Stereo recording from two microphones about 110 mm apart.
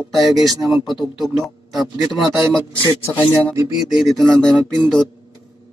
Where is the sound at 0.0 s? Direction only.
Centre (ahead or behind).